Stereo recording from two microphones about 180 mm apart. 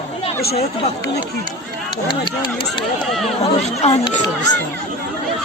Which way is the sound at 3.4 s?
35° left (ahead or behind).